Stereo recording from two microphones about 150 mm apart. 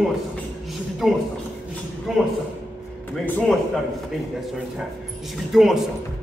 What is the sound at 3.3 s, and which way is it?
Speech, 10° left (ahead or behind).